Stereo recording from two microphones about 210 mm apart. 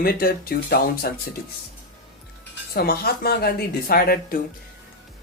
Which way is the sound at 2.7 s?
45° left (ahead or behind).